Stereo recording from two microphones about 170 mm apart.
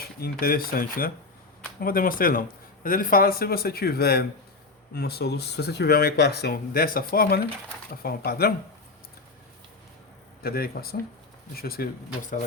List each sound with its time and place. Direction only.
0.2 s a man's voice: 60° left (ahead or behind)
10.4 s a man's voice: 60° left (ahead or behind)